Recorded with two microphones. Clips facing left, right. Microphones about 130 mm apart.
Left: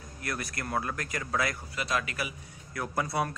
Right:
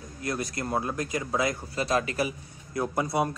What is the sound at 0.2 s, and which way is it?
A man's voice, 20° right (ahead or behind).